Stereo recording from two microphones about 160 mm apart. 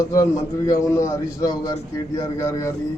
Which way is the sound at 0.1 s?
20° left (ahead or behind).